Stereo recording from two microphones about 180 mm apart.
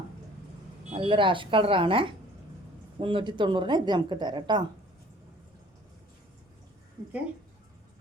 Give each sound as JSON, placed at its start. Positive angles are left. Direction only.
{"t": 0.9, "sound": "speech", "side_deg": -30}